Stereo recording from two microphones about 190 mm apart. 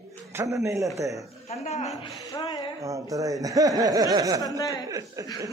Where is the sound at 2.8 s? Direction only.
15° right (ahead or behind).